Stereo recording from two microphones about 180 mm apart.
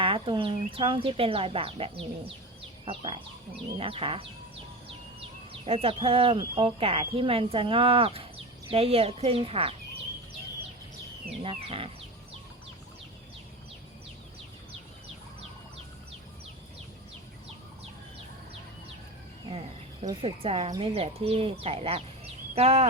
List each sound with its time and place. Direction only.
0.0 s speech: 30° right (ahead or behind)
5.5 s speech: 35° right (ahead or behind)
11.4 s speech: 30° right (ahead or behind)
19.5 s cricket: 30° right (ahead or behind)
20.2 s speech: 30° right (ahead or behind)